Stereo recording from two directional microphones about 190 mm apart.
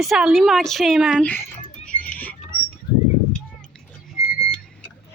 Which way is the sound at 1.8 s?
5° left (ahead or behind).